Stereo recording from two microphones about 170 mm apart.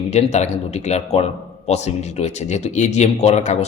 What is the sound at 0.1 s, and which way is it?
A man's voice, 40° left (ahead or behind).